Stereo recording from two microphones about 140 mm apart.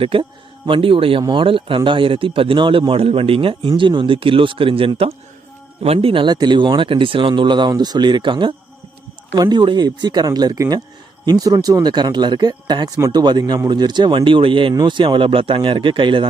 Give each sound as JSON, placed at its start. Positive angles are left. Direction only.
{"t": 0.0, "sound": "a man's voice", "side_deg": -40}